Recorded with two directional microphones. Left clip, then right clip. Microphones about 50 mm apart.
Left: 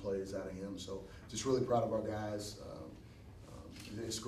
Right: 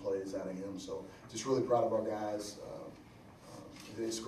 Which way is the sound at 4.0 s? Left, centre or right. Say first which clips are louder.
Right 5 dB; left.